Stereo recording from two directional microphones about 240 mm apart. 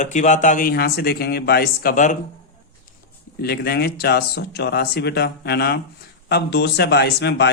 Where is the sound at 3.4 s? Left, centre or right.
Left.